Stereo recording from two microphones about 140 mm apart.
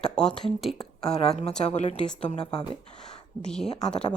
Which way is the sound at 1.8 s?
55° left (ahead or behind).